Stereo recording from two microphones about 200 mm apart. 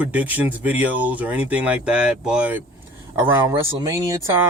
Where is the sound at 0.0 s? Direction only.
10° right (ahead or behind).